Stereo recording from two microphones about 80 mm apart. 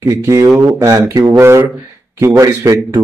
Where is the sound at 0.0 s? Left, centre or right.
Right.